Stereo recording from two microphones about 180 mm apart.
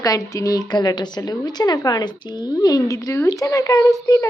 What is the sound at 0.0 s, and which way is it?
A woman's voice, 20° left (ahead or behind).